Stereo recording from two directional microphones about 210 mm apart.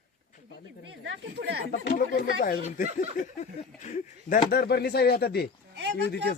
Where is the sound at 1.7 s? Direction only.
50° left (ahead or behind).